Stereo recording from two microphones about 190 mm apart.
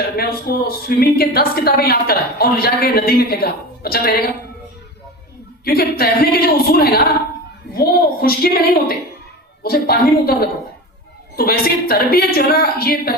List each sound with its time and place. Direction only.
0.2 s a man's voice: 55° left (ahead or behind)
5.6 s a man's voice: 55° left (ahead or behind)